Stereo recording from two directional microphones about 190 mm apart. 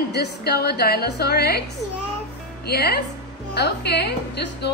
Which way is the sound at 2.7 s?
55° left (ahead or behind).